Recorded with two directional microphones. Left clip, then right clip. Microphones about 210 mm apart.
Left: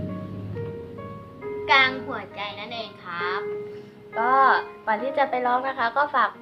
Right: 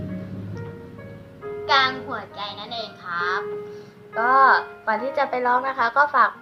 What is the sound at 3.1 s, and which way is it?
Speech, 15° left (ahead or behind).